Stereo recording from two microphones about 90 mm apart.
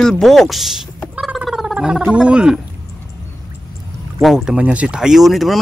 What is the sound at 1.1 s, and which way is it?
Gargling, 5° right (ahead or behind).